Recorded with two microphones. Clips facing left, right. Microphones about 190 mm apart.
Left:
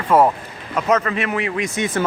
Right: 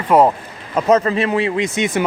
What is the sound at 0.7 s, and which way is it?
A man's voice, 30° right (ahead or behind).